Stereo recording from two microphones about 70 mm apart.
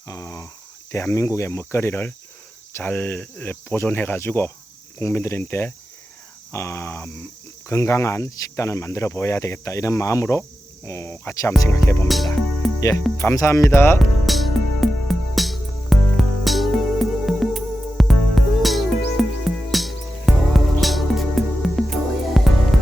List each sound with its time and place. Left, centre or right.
0.1 s speech: left
0.9 s speech: left
12.0 s music: centre
12.8 s speech: left
14.3 s music: centre